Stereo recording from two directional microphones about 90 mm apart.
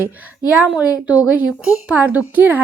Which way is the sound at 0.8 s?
15° right (ahead or behind).